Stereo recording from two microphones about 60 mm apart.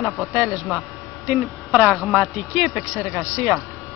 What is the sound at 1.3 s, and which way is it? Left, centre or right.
Speech, centre.